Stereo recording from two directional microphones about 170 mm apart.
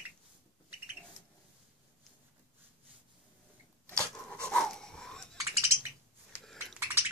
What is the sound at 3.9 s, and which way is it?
Dog, 5° left (ahead or behind).